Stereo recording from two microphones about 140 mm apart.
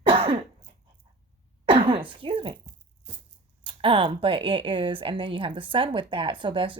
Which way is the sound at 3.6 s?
40° right (ahead or behind).